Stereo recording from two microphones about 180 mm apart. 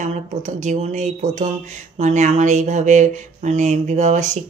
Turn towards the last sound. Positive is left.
turn(degrees=-45)  # may be behind; listen again after turning